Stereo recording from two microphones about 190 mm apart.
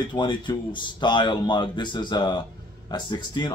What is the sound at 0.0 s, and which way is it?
Speech, 25° left (ahead or behind).